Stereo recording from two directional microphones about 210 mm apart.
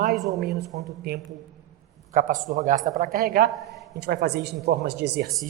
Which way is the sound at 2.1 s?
40° right (ahead or behind).